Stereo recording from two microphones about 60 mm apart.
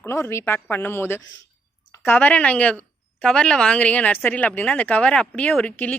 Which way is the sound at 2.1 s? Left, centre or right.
Left.